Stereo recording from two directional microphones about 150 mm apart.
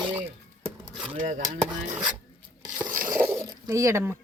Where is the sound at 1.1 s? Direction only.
60° right (ahead or behind).